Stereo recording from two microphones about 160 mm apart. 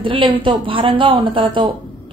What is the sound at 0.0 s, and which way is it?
A woman's voice, 30° right (ahead or behind).